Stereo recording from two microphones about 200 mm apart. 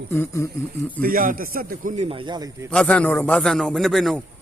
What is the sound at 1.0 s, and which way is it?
A man's voice, 45° right (ahead or behind).